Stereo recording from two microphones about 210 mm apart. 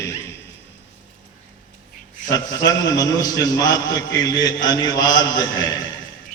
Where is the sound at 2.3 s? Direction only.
20° left (ahead or behind).